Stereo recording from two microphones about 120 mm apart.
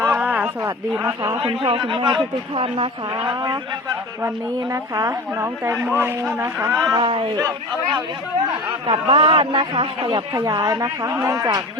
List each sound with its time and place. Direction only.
0.0 s a sound: 20° right (ahead or behind)
0.9 s a woman's voice: 20° right (ahead or behind)
1.4 s a man's voice: 45° right (ahead or behind); by 6.8 s 25° right (ahead or behind)
7.0 s a man's voice: 45° right (ahead or behind)
8.9 s a man's voice: 45° right (ahead or behind); by 11.6 s 30° right (ahead or behind)